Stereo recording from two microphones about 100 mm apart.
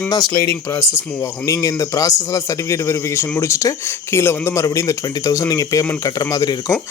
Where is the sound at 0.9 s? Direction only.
30° left (ahead or behind).